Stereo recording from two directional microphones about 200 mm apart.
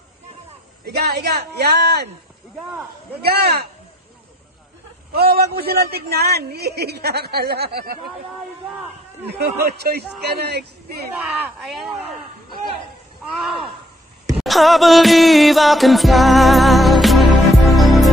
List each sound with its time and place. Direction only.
0.8 s a man's voice: 55° right (ahead or behind)
3.3 s a man's voice: 55° right (ahead or behind)
5.1 s a man's voice: 50° right (ahead or behind)
9.3 s a man's voice: 50° right (ahead or behind)
11.2 s speech: centre (ahead or behind)
13.2 s speech: centre (ahead or behind)
14.4 s music: centre (ahead or behind)